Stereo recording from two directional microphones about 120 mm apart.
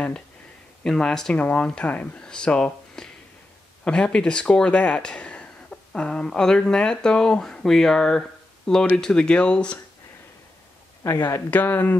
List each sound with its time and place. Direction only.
0.8 s speech: 5° left (ahead or behind)
11.1 s speech: 25° left (ahead or behind)
11.5 s speech: 15° left (ahead or behind)